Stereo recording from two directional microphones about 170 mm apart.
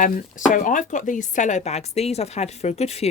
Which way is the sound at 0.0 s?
50° left (ahead or behind).